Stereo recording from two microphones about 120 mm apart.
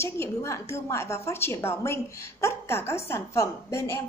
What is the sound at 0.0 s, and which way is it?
A woman's voice, 20° left (ahead or behind).